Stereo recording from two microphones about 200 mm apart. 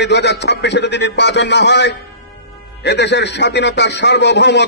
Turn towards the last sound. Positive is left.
turn(degrees=60)  # may be behind; listen again after turning